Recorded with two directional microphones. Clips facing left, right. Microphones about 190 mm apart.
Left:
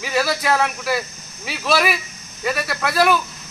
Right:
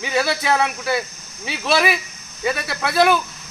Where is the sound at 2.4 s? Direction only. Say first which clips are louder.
Even; 25° right (ahead or behind).